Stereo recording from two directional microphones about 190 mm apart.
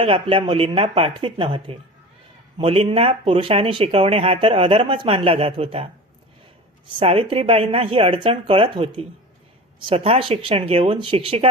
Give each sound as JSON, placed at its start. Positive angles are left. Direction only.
{"t": 0.0, "sound": "speech", "side_deg": -30}
{"t": 7.0, "sound": "speech", "side_deg": -30}